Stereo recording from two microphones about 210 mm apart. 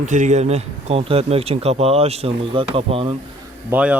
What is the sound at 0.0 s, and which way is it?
Speech, 35° right (ahead or behind).